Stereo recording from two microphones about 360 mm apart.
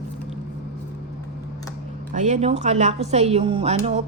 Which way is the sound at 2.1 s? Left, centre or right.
Centre.